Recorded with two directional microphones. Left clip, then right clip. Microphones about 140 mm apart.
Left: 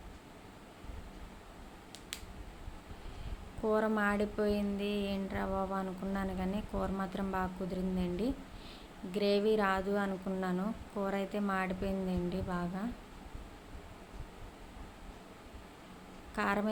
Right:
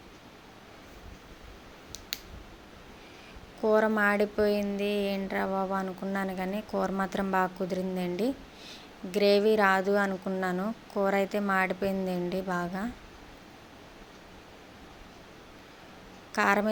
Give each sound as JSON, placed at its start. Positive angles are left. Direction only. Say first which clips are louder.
{"t": 3.6, "sound": "a woman's voice", "louder": "right 7 dB", "side_deg": -35}
{"t": 16.3, "sound": "a woman's voice", "louder": "right 8 dB", "side_deg": -45}